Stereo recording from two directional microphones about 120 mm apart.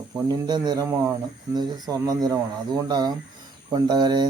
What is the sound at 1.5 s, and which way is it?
Speech, 35° right (ahead or behind).